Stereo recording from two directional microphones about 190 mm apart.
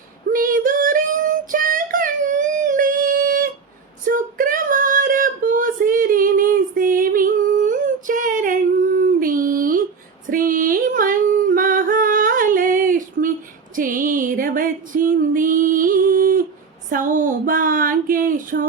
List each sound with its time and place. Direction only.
0.3 s child singing: 45° right (ahead or behind)
4.0 s female singing: 45° right (ahead or behind)
13.7 s music: 45° right (ahead or behind)
16.9 s a sound: 45° right (ahead or behind)